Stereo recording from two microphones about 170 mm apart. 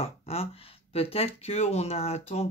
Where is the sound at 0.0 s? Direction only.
35° left (ahead or behind).